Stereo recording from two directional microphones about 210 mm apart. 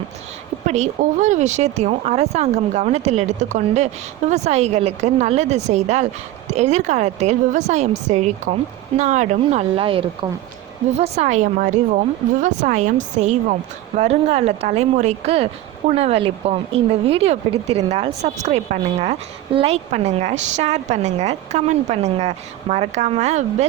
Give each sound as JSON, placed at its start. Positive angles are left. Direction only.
{"t": 0.7, "sound": "a woman's voice", "side_deg": -35}